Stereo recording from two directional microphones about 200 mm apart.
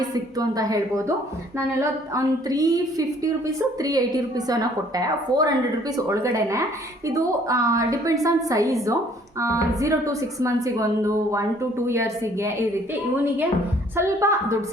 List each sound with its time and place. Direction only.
0.3 s a woman's voice: 20° right (ahead or behind)
3.8 s a woman's voice: 20° right (ahead or behind)
13.9 s a woman's voice: 15° right (ahead or behind)